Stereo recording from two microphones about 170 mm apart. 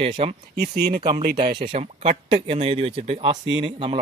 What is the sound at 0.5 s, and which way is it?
Speech, 65° right (ahead or behind).